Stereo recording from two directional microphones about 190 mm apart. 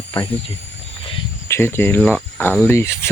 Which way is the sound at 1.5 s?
10° left (ahead or behind).